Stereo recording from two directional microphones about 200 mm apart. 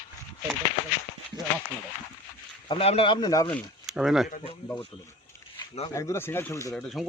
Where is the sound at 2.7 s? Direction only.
30° left (ahead or behind).